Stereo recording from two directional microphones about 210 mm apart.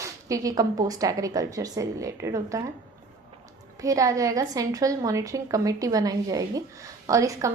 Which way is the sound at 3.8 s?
15° right (ahead or behind).